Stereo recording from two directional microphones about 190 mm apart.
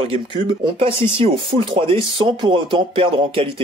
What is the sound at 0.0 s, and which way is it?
A man's voice, 30° right (ahead or behind).